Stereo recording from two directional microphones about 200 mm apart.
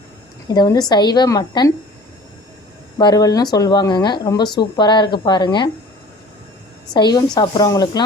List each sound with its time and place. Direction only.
0.4 s speech: 20° left (ahead or behind)
3.0 s speech: 20° left (ahead or behind)
6.9 s speech: 20° left (ahead or behind)